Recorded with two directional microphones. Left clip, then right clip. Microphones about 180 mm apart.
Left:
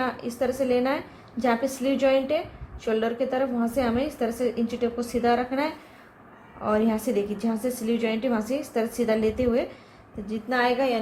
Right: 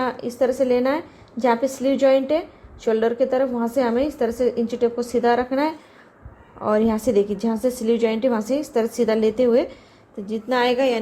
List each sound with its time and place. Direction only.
0.0 s a woman's voice: 40° right (ahead or behind)